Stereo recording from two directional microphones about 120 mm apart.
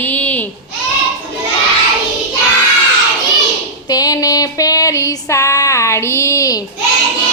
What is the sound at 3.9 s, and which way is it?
Female singing, 30° left (ahead or behind).